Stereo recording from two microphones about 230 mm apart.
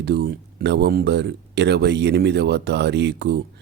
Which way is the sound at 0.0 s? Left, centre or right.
Right.